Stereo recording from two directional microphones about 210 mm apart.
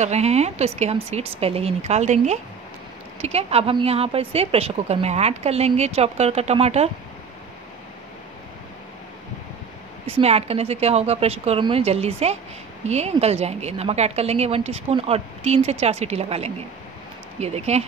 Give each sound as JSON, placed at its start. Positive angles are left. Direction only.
{"t": 0.0, "sound": "a woman's voice", "side_deg": -30}
{"t": 10.0, "sound": "a woman's voice", "side_deg": -30}